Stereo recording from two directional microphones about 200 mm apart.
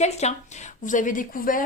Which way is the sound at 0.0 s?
35° left (ahead or behind).